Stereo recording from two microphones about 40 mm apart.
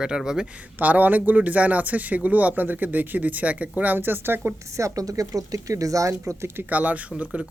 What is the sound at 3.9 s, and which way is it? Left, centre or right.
Speech, right.